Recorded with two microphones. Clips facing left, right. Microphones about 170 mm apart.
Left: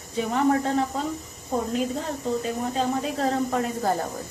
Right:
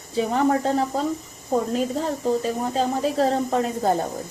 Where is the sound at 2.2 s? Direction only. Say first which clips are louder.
Right 3 dB; 35° right (ahead or behind).